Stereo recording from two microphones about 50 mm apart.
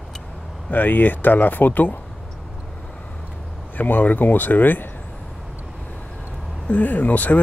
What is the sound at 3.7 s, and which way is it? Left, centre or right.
Speech, left.